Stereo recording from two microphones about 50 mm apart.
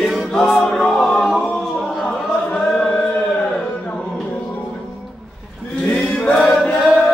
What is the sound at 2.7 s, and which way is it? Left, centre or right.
Chant, centre.